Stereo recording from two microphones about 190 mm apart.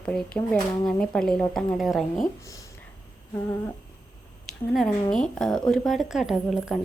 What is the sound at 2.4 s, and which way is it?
Speech, 15° left (ahead or behind).